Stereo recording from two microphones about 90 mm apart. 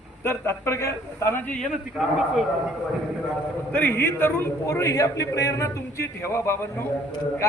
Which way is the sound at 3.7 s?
20° left (ahead or behind).